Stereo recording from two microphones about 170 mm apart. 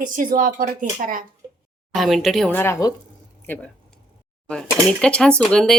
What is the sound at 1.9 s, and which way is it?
Speech, centre (ahead or behind).